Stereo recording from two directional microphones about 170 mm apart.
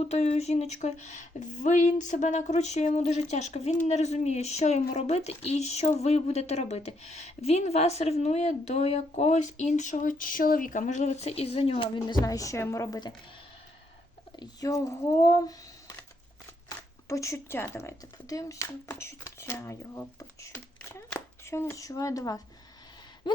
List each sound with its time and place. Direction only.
0.0 s speech: 40° left (ahead or behind); by 13.1 s 25° left (ahead or behind)
14.3 s speech: 20° left (ahead or behind)
23.3 s gasp: 25° left (ahead or behind)